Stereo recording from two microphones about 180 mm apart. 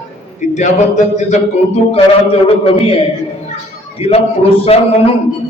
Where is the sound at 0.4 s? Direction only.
40° left (ahead or behind).